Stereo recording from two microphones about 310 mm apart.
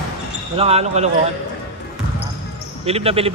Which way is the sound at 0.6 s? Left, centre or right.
Centre.